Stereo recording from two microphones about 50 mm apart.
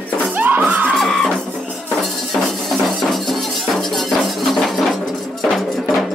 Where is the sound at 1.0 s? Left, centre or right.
Centre.